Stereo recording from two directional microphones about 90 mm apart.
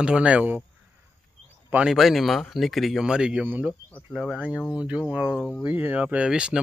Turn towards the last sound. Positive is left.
turn(degrees=-10)  # may be behind; listen again after turning